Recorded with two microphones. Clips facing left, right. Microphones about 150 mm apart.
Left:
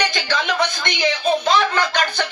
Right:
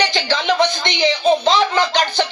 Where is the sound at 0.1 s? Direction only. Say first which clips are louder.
Right 4 dB; 30° right (ahead or behind).